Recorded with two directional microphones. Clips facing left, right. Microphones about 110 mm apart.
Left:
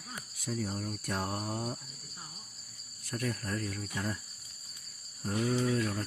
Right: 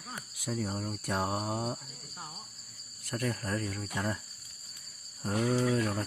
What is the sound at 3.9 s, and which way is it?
Cricket, 60° right (ahead or behind).